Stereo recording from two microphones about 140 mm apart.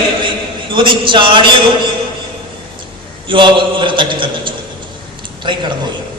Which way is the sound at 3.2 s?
35° right (ahead or behind).